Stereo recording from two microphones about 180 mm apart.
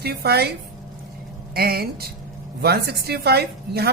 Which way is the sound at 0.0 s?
60° right (ahead or behind).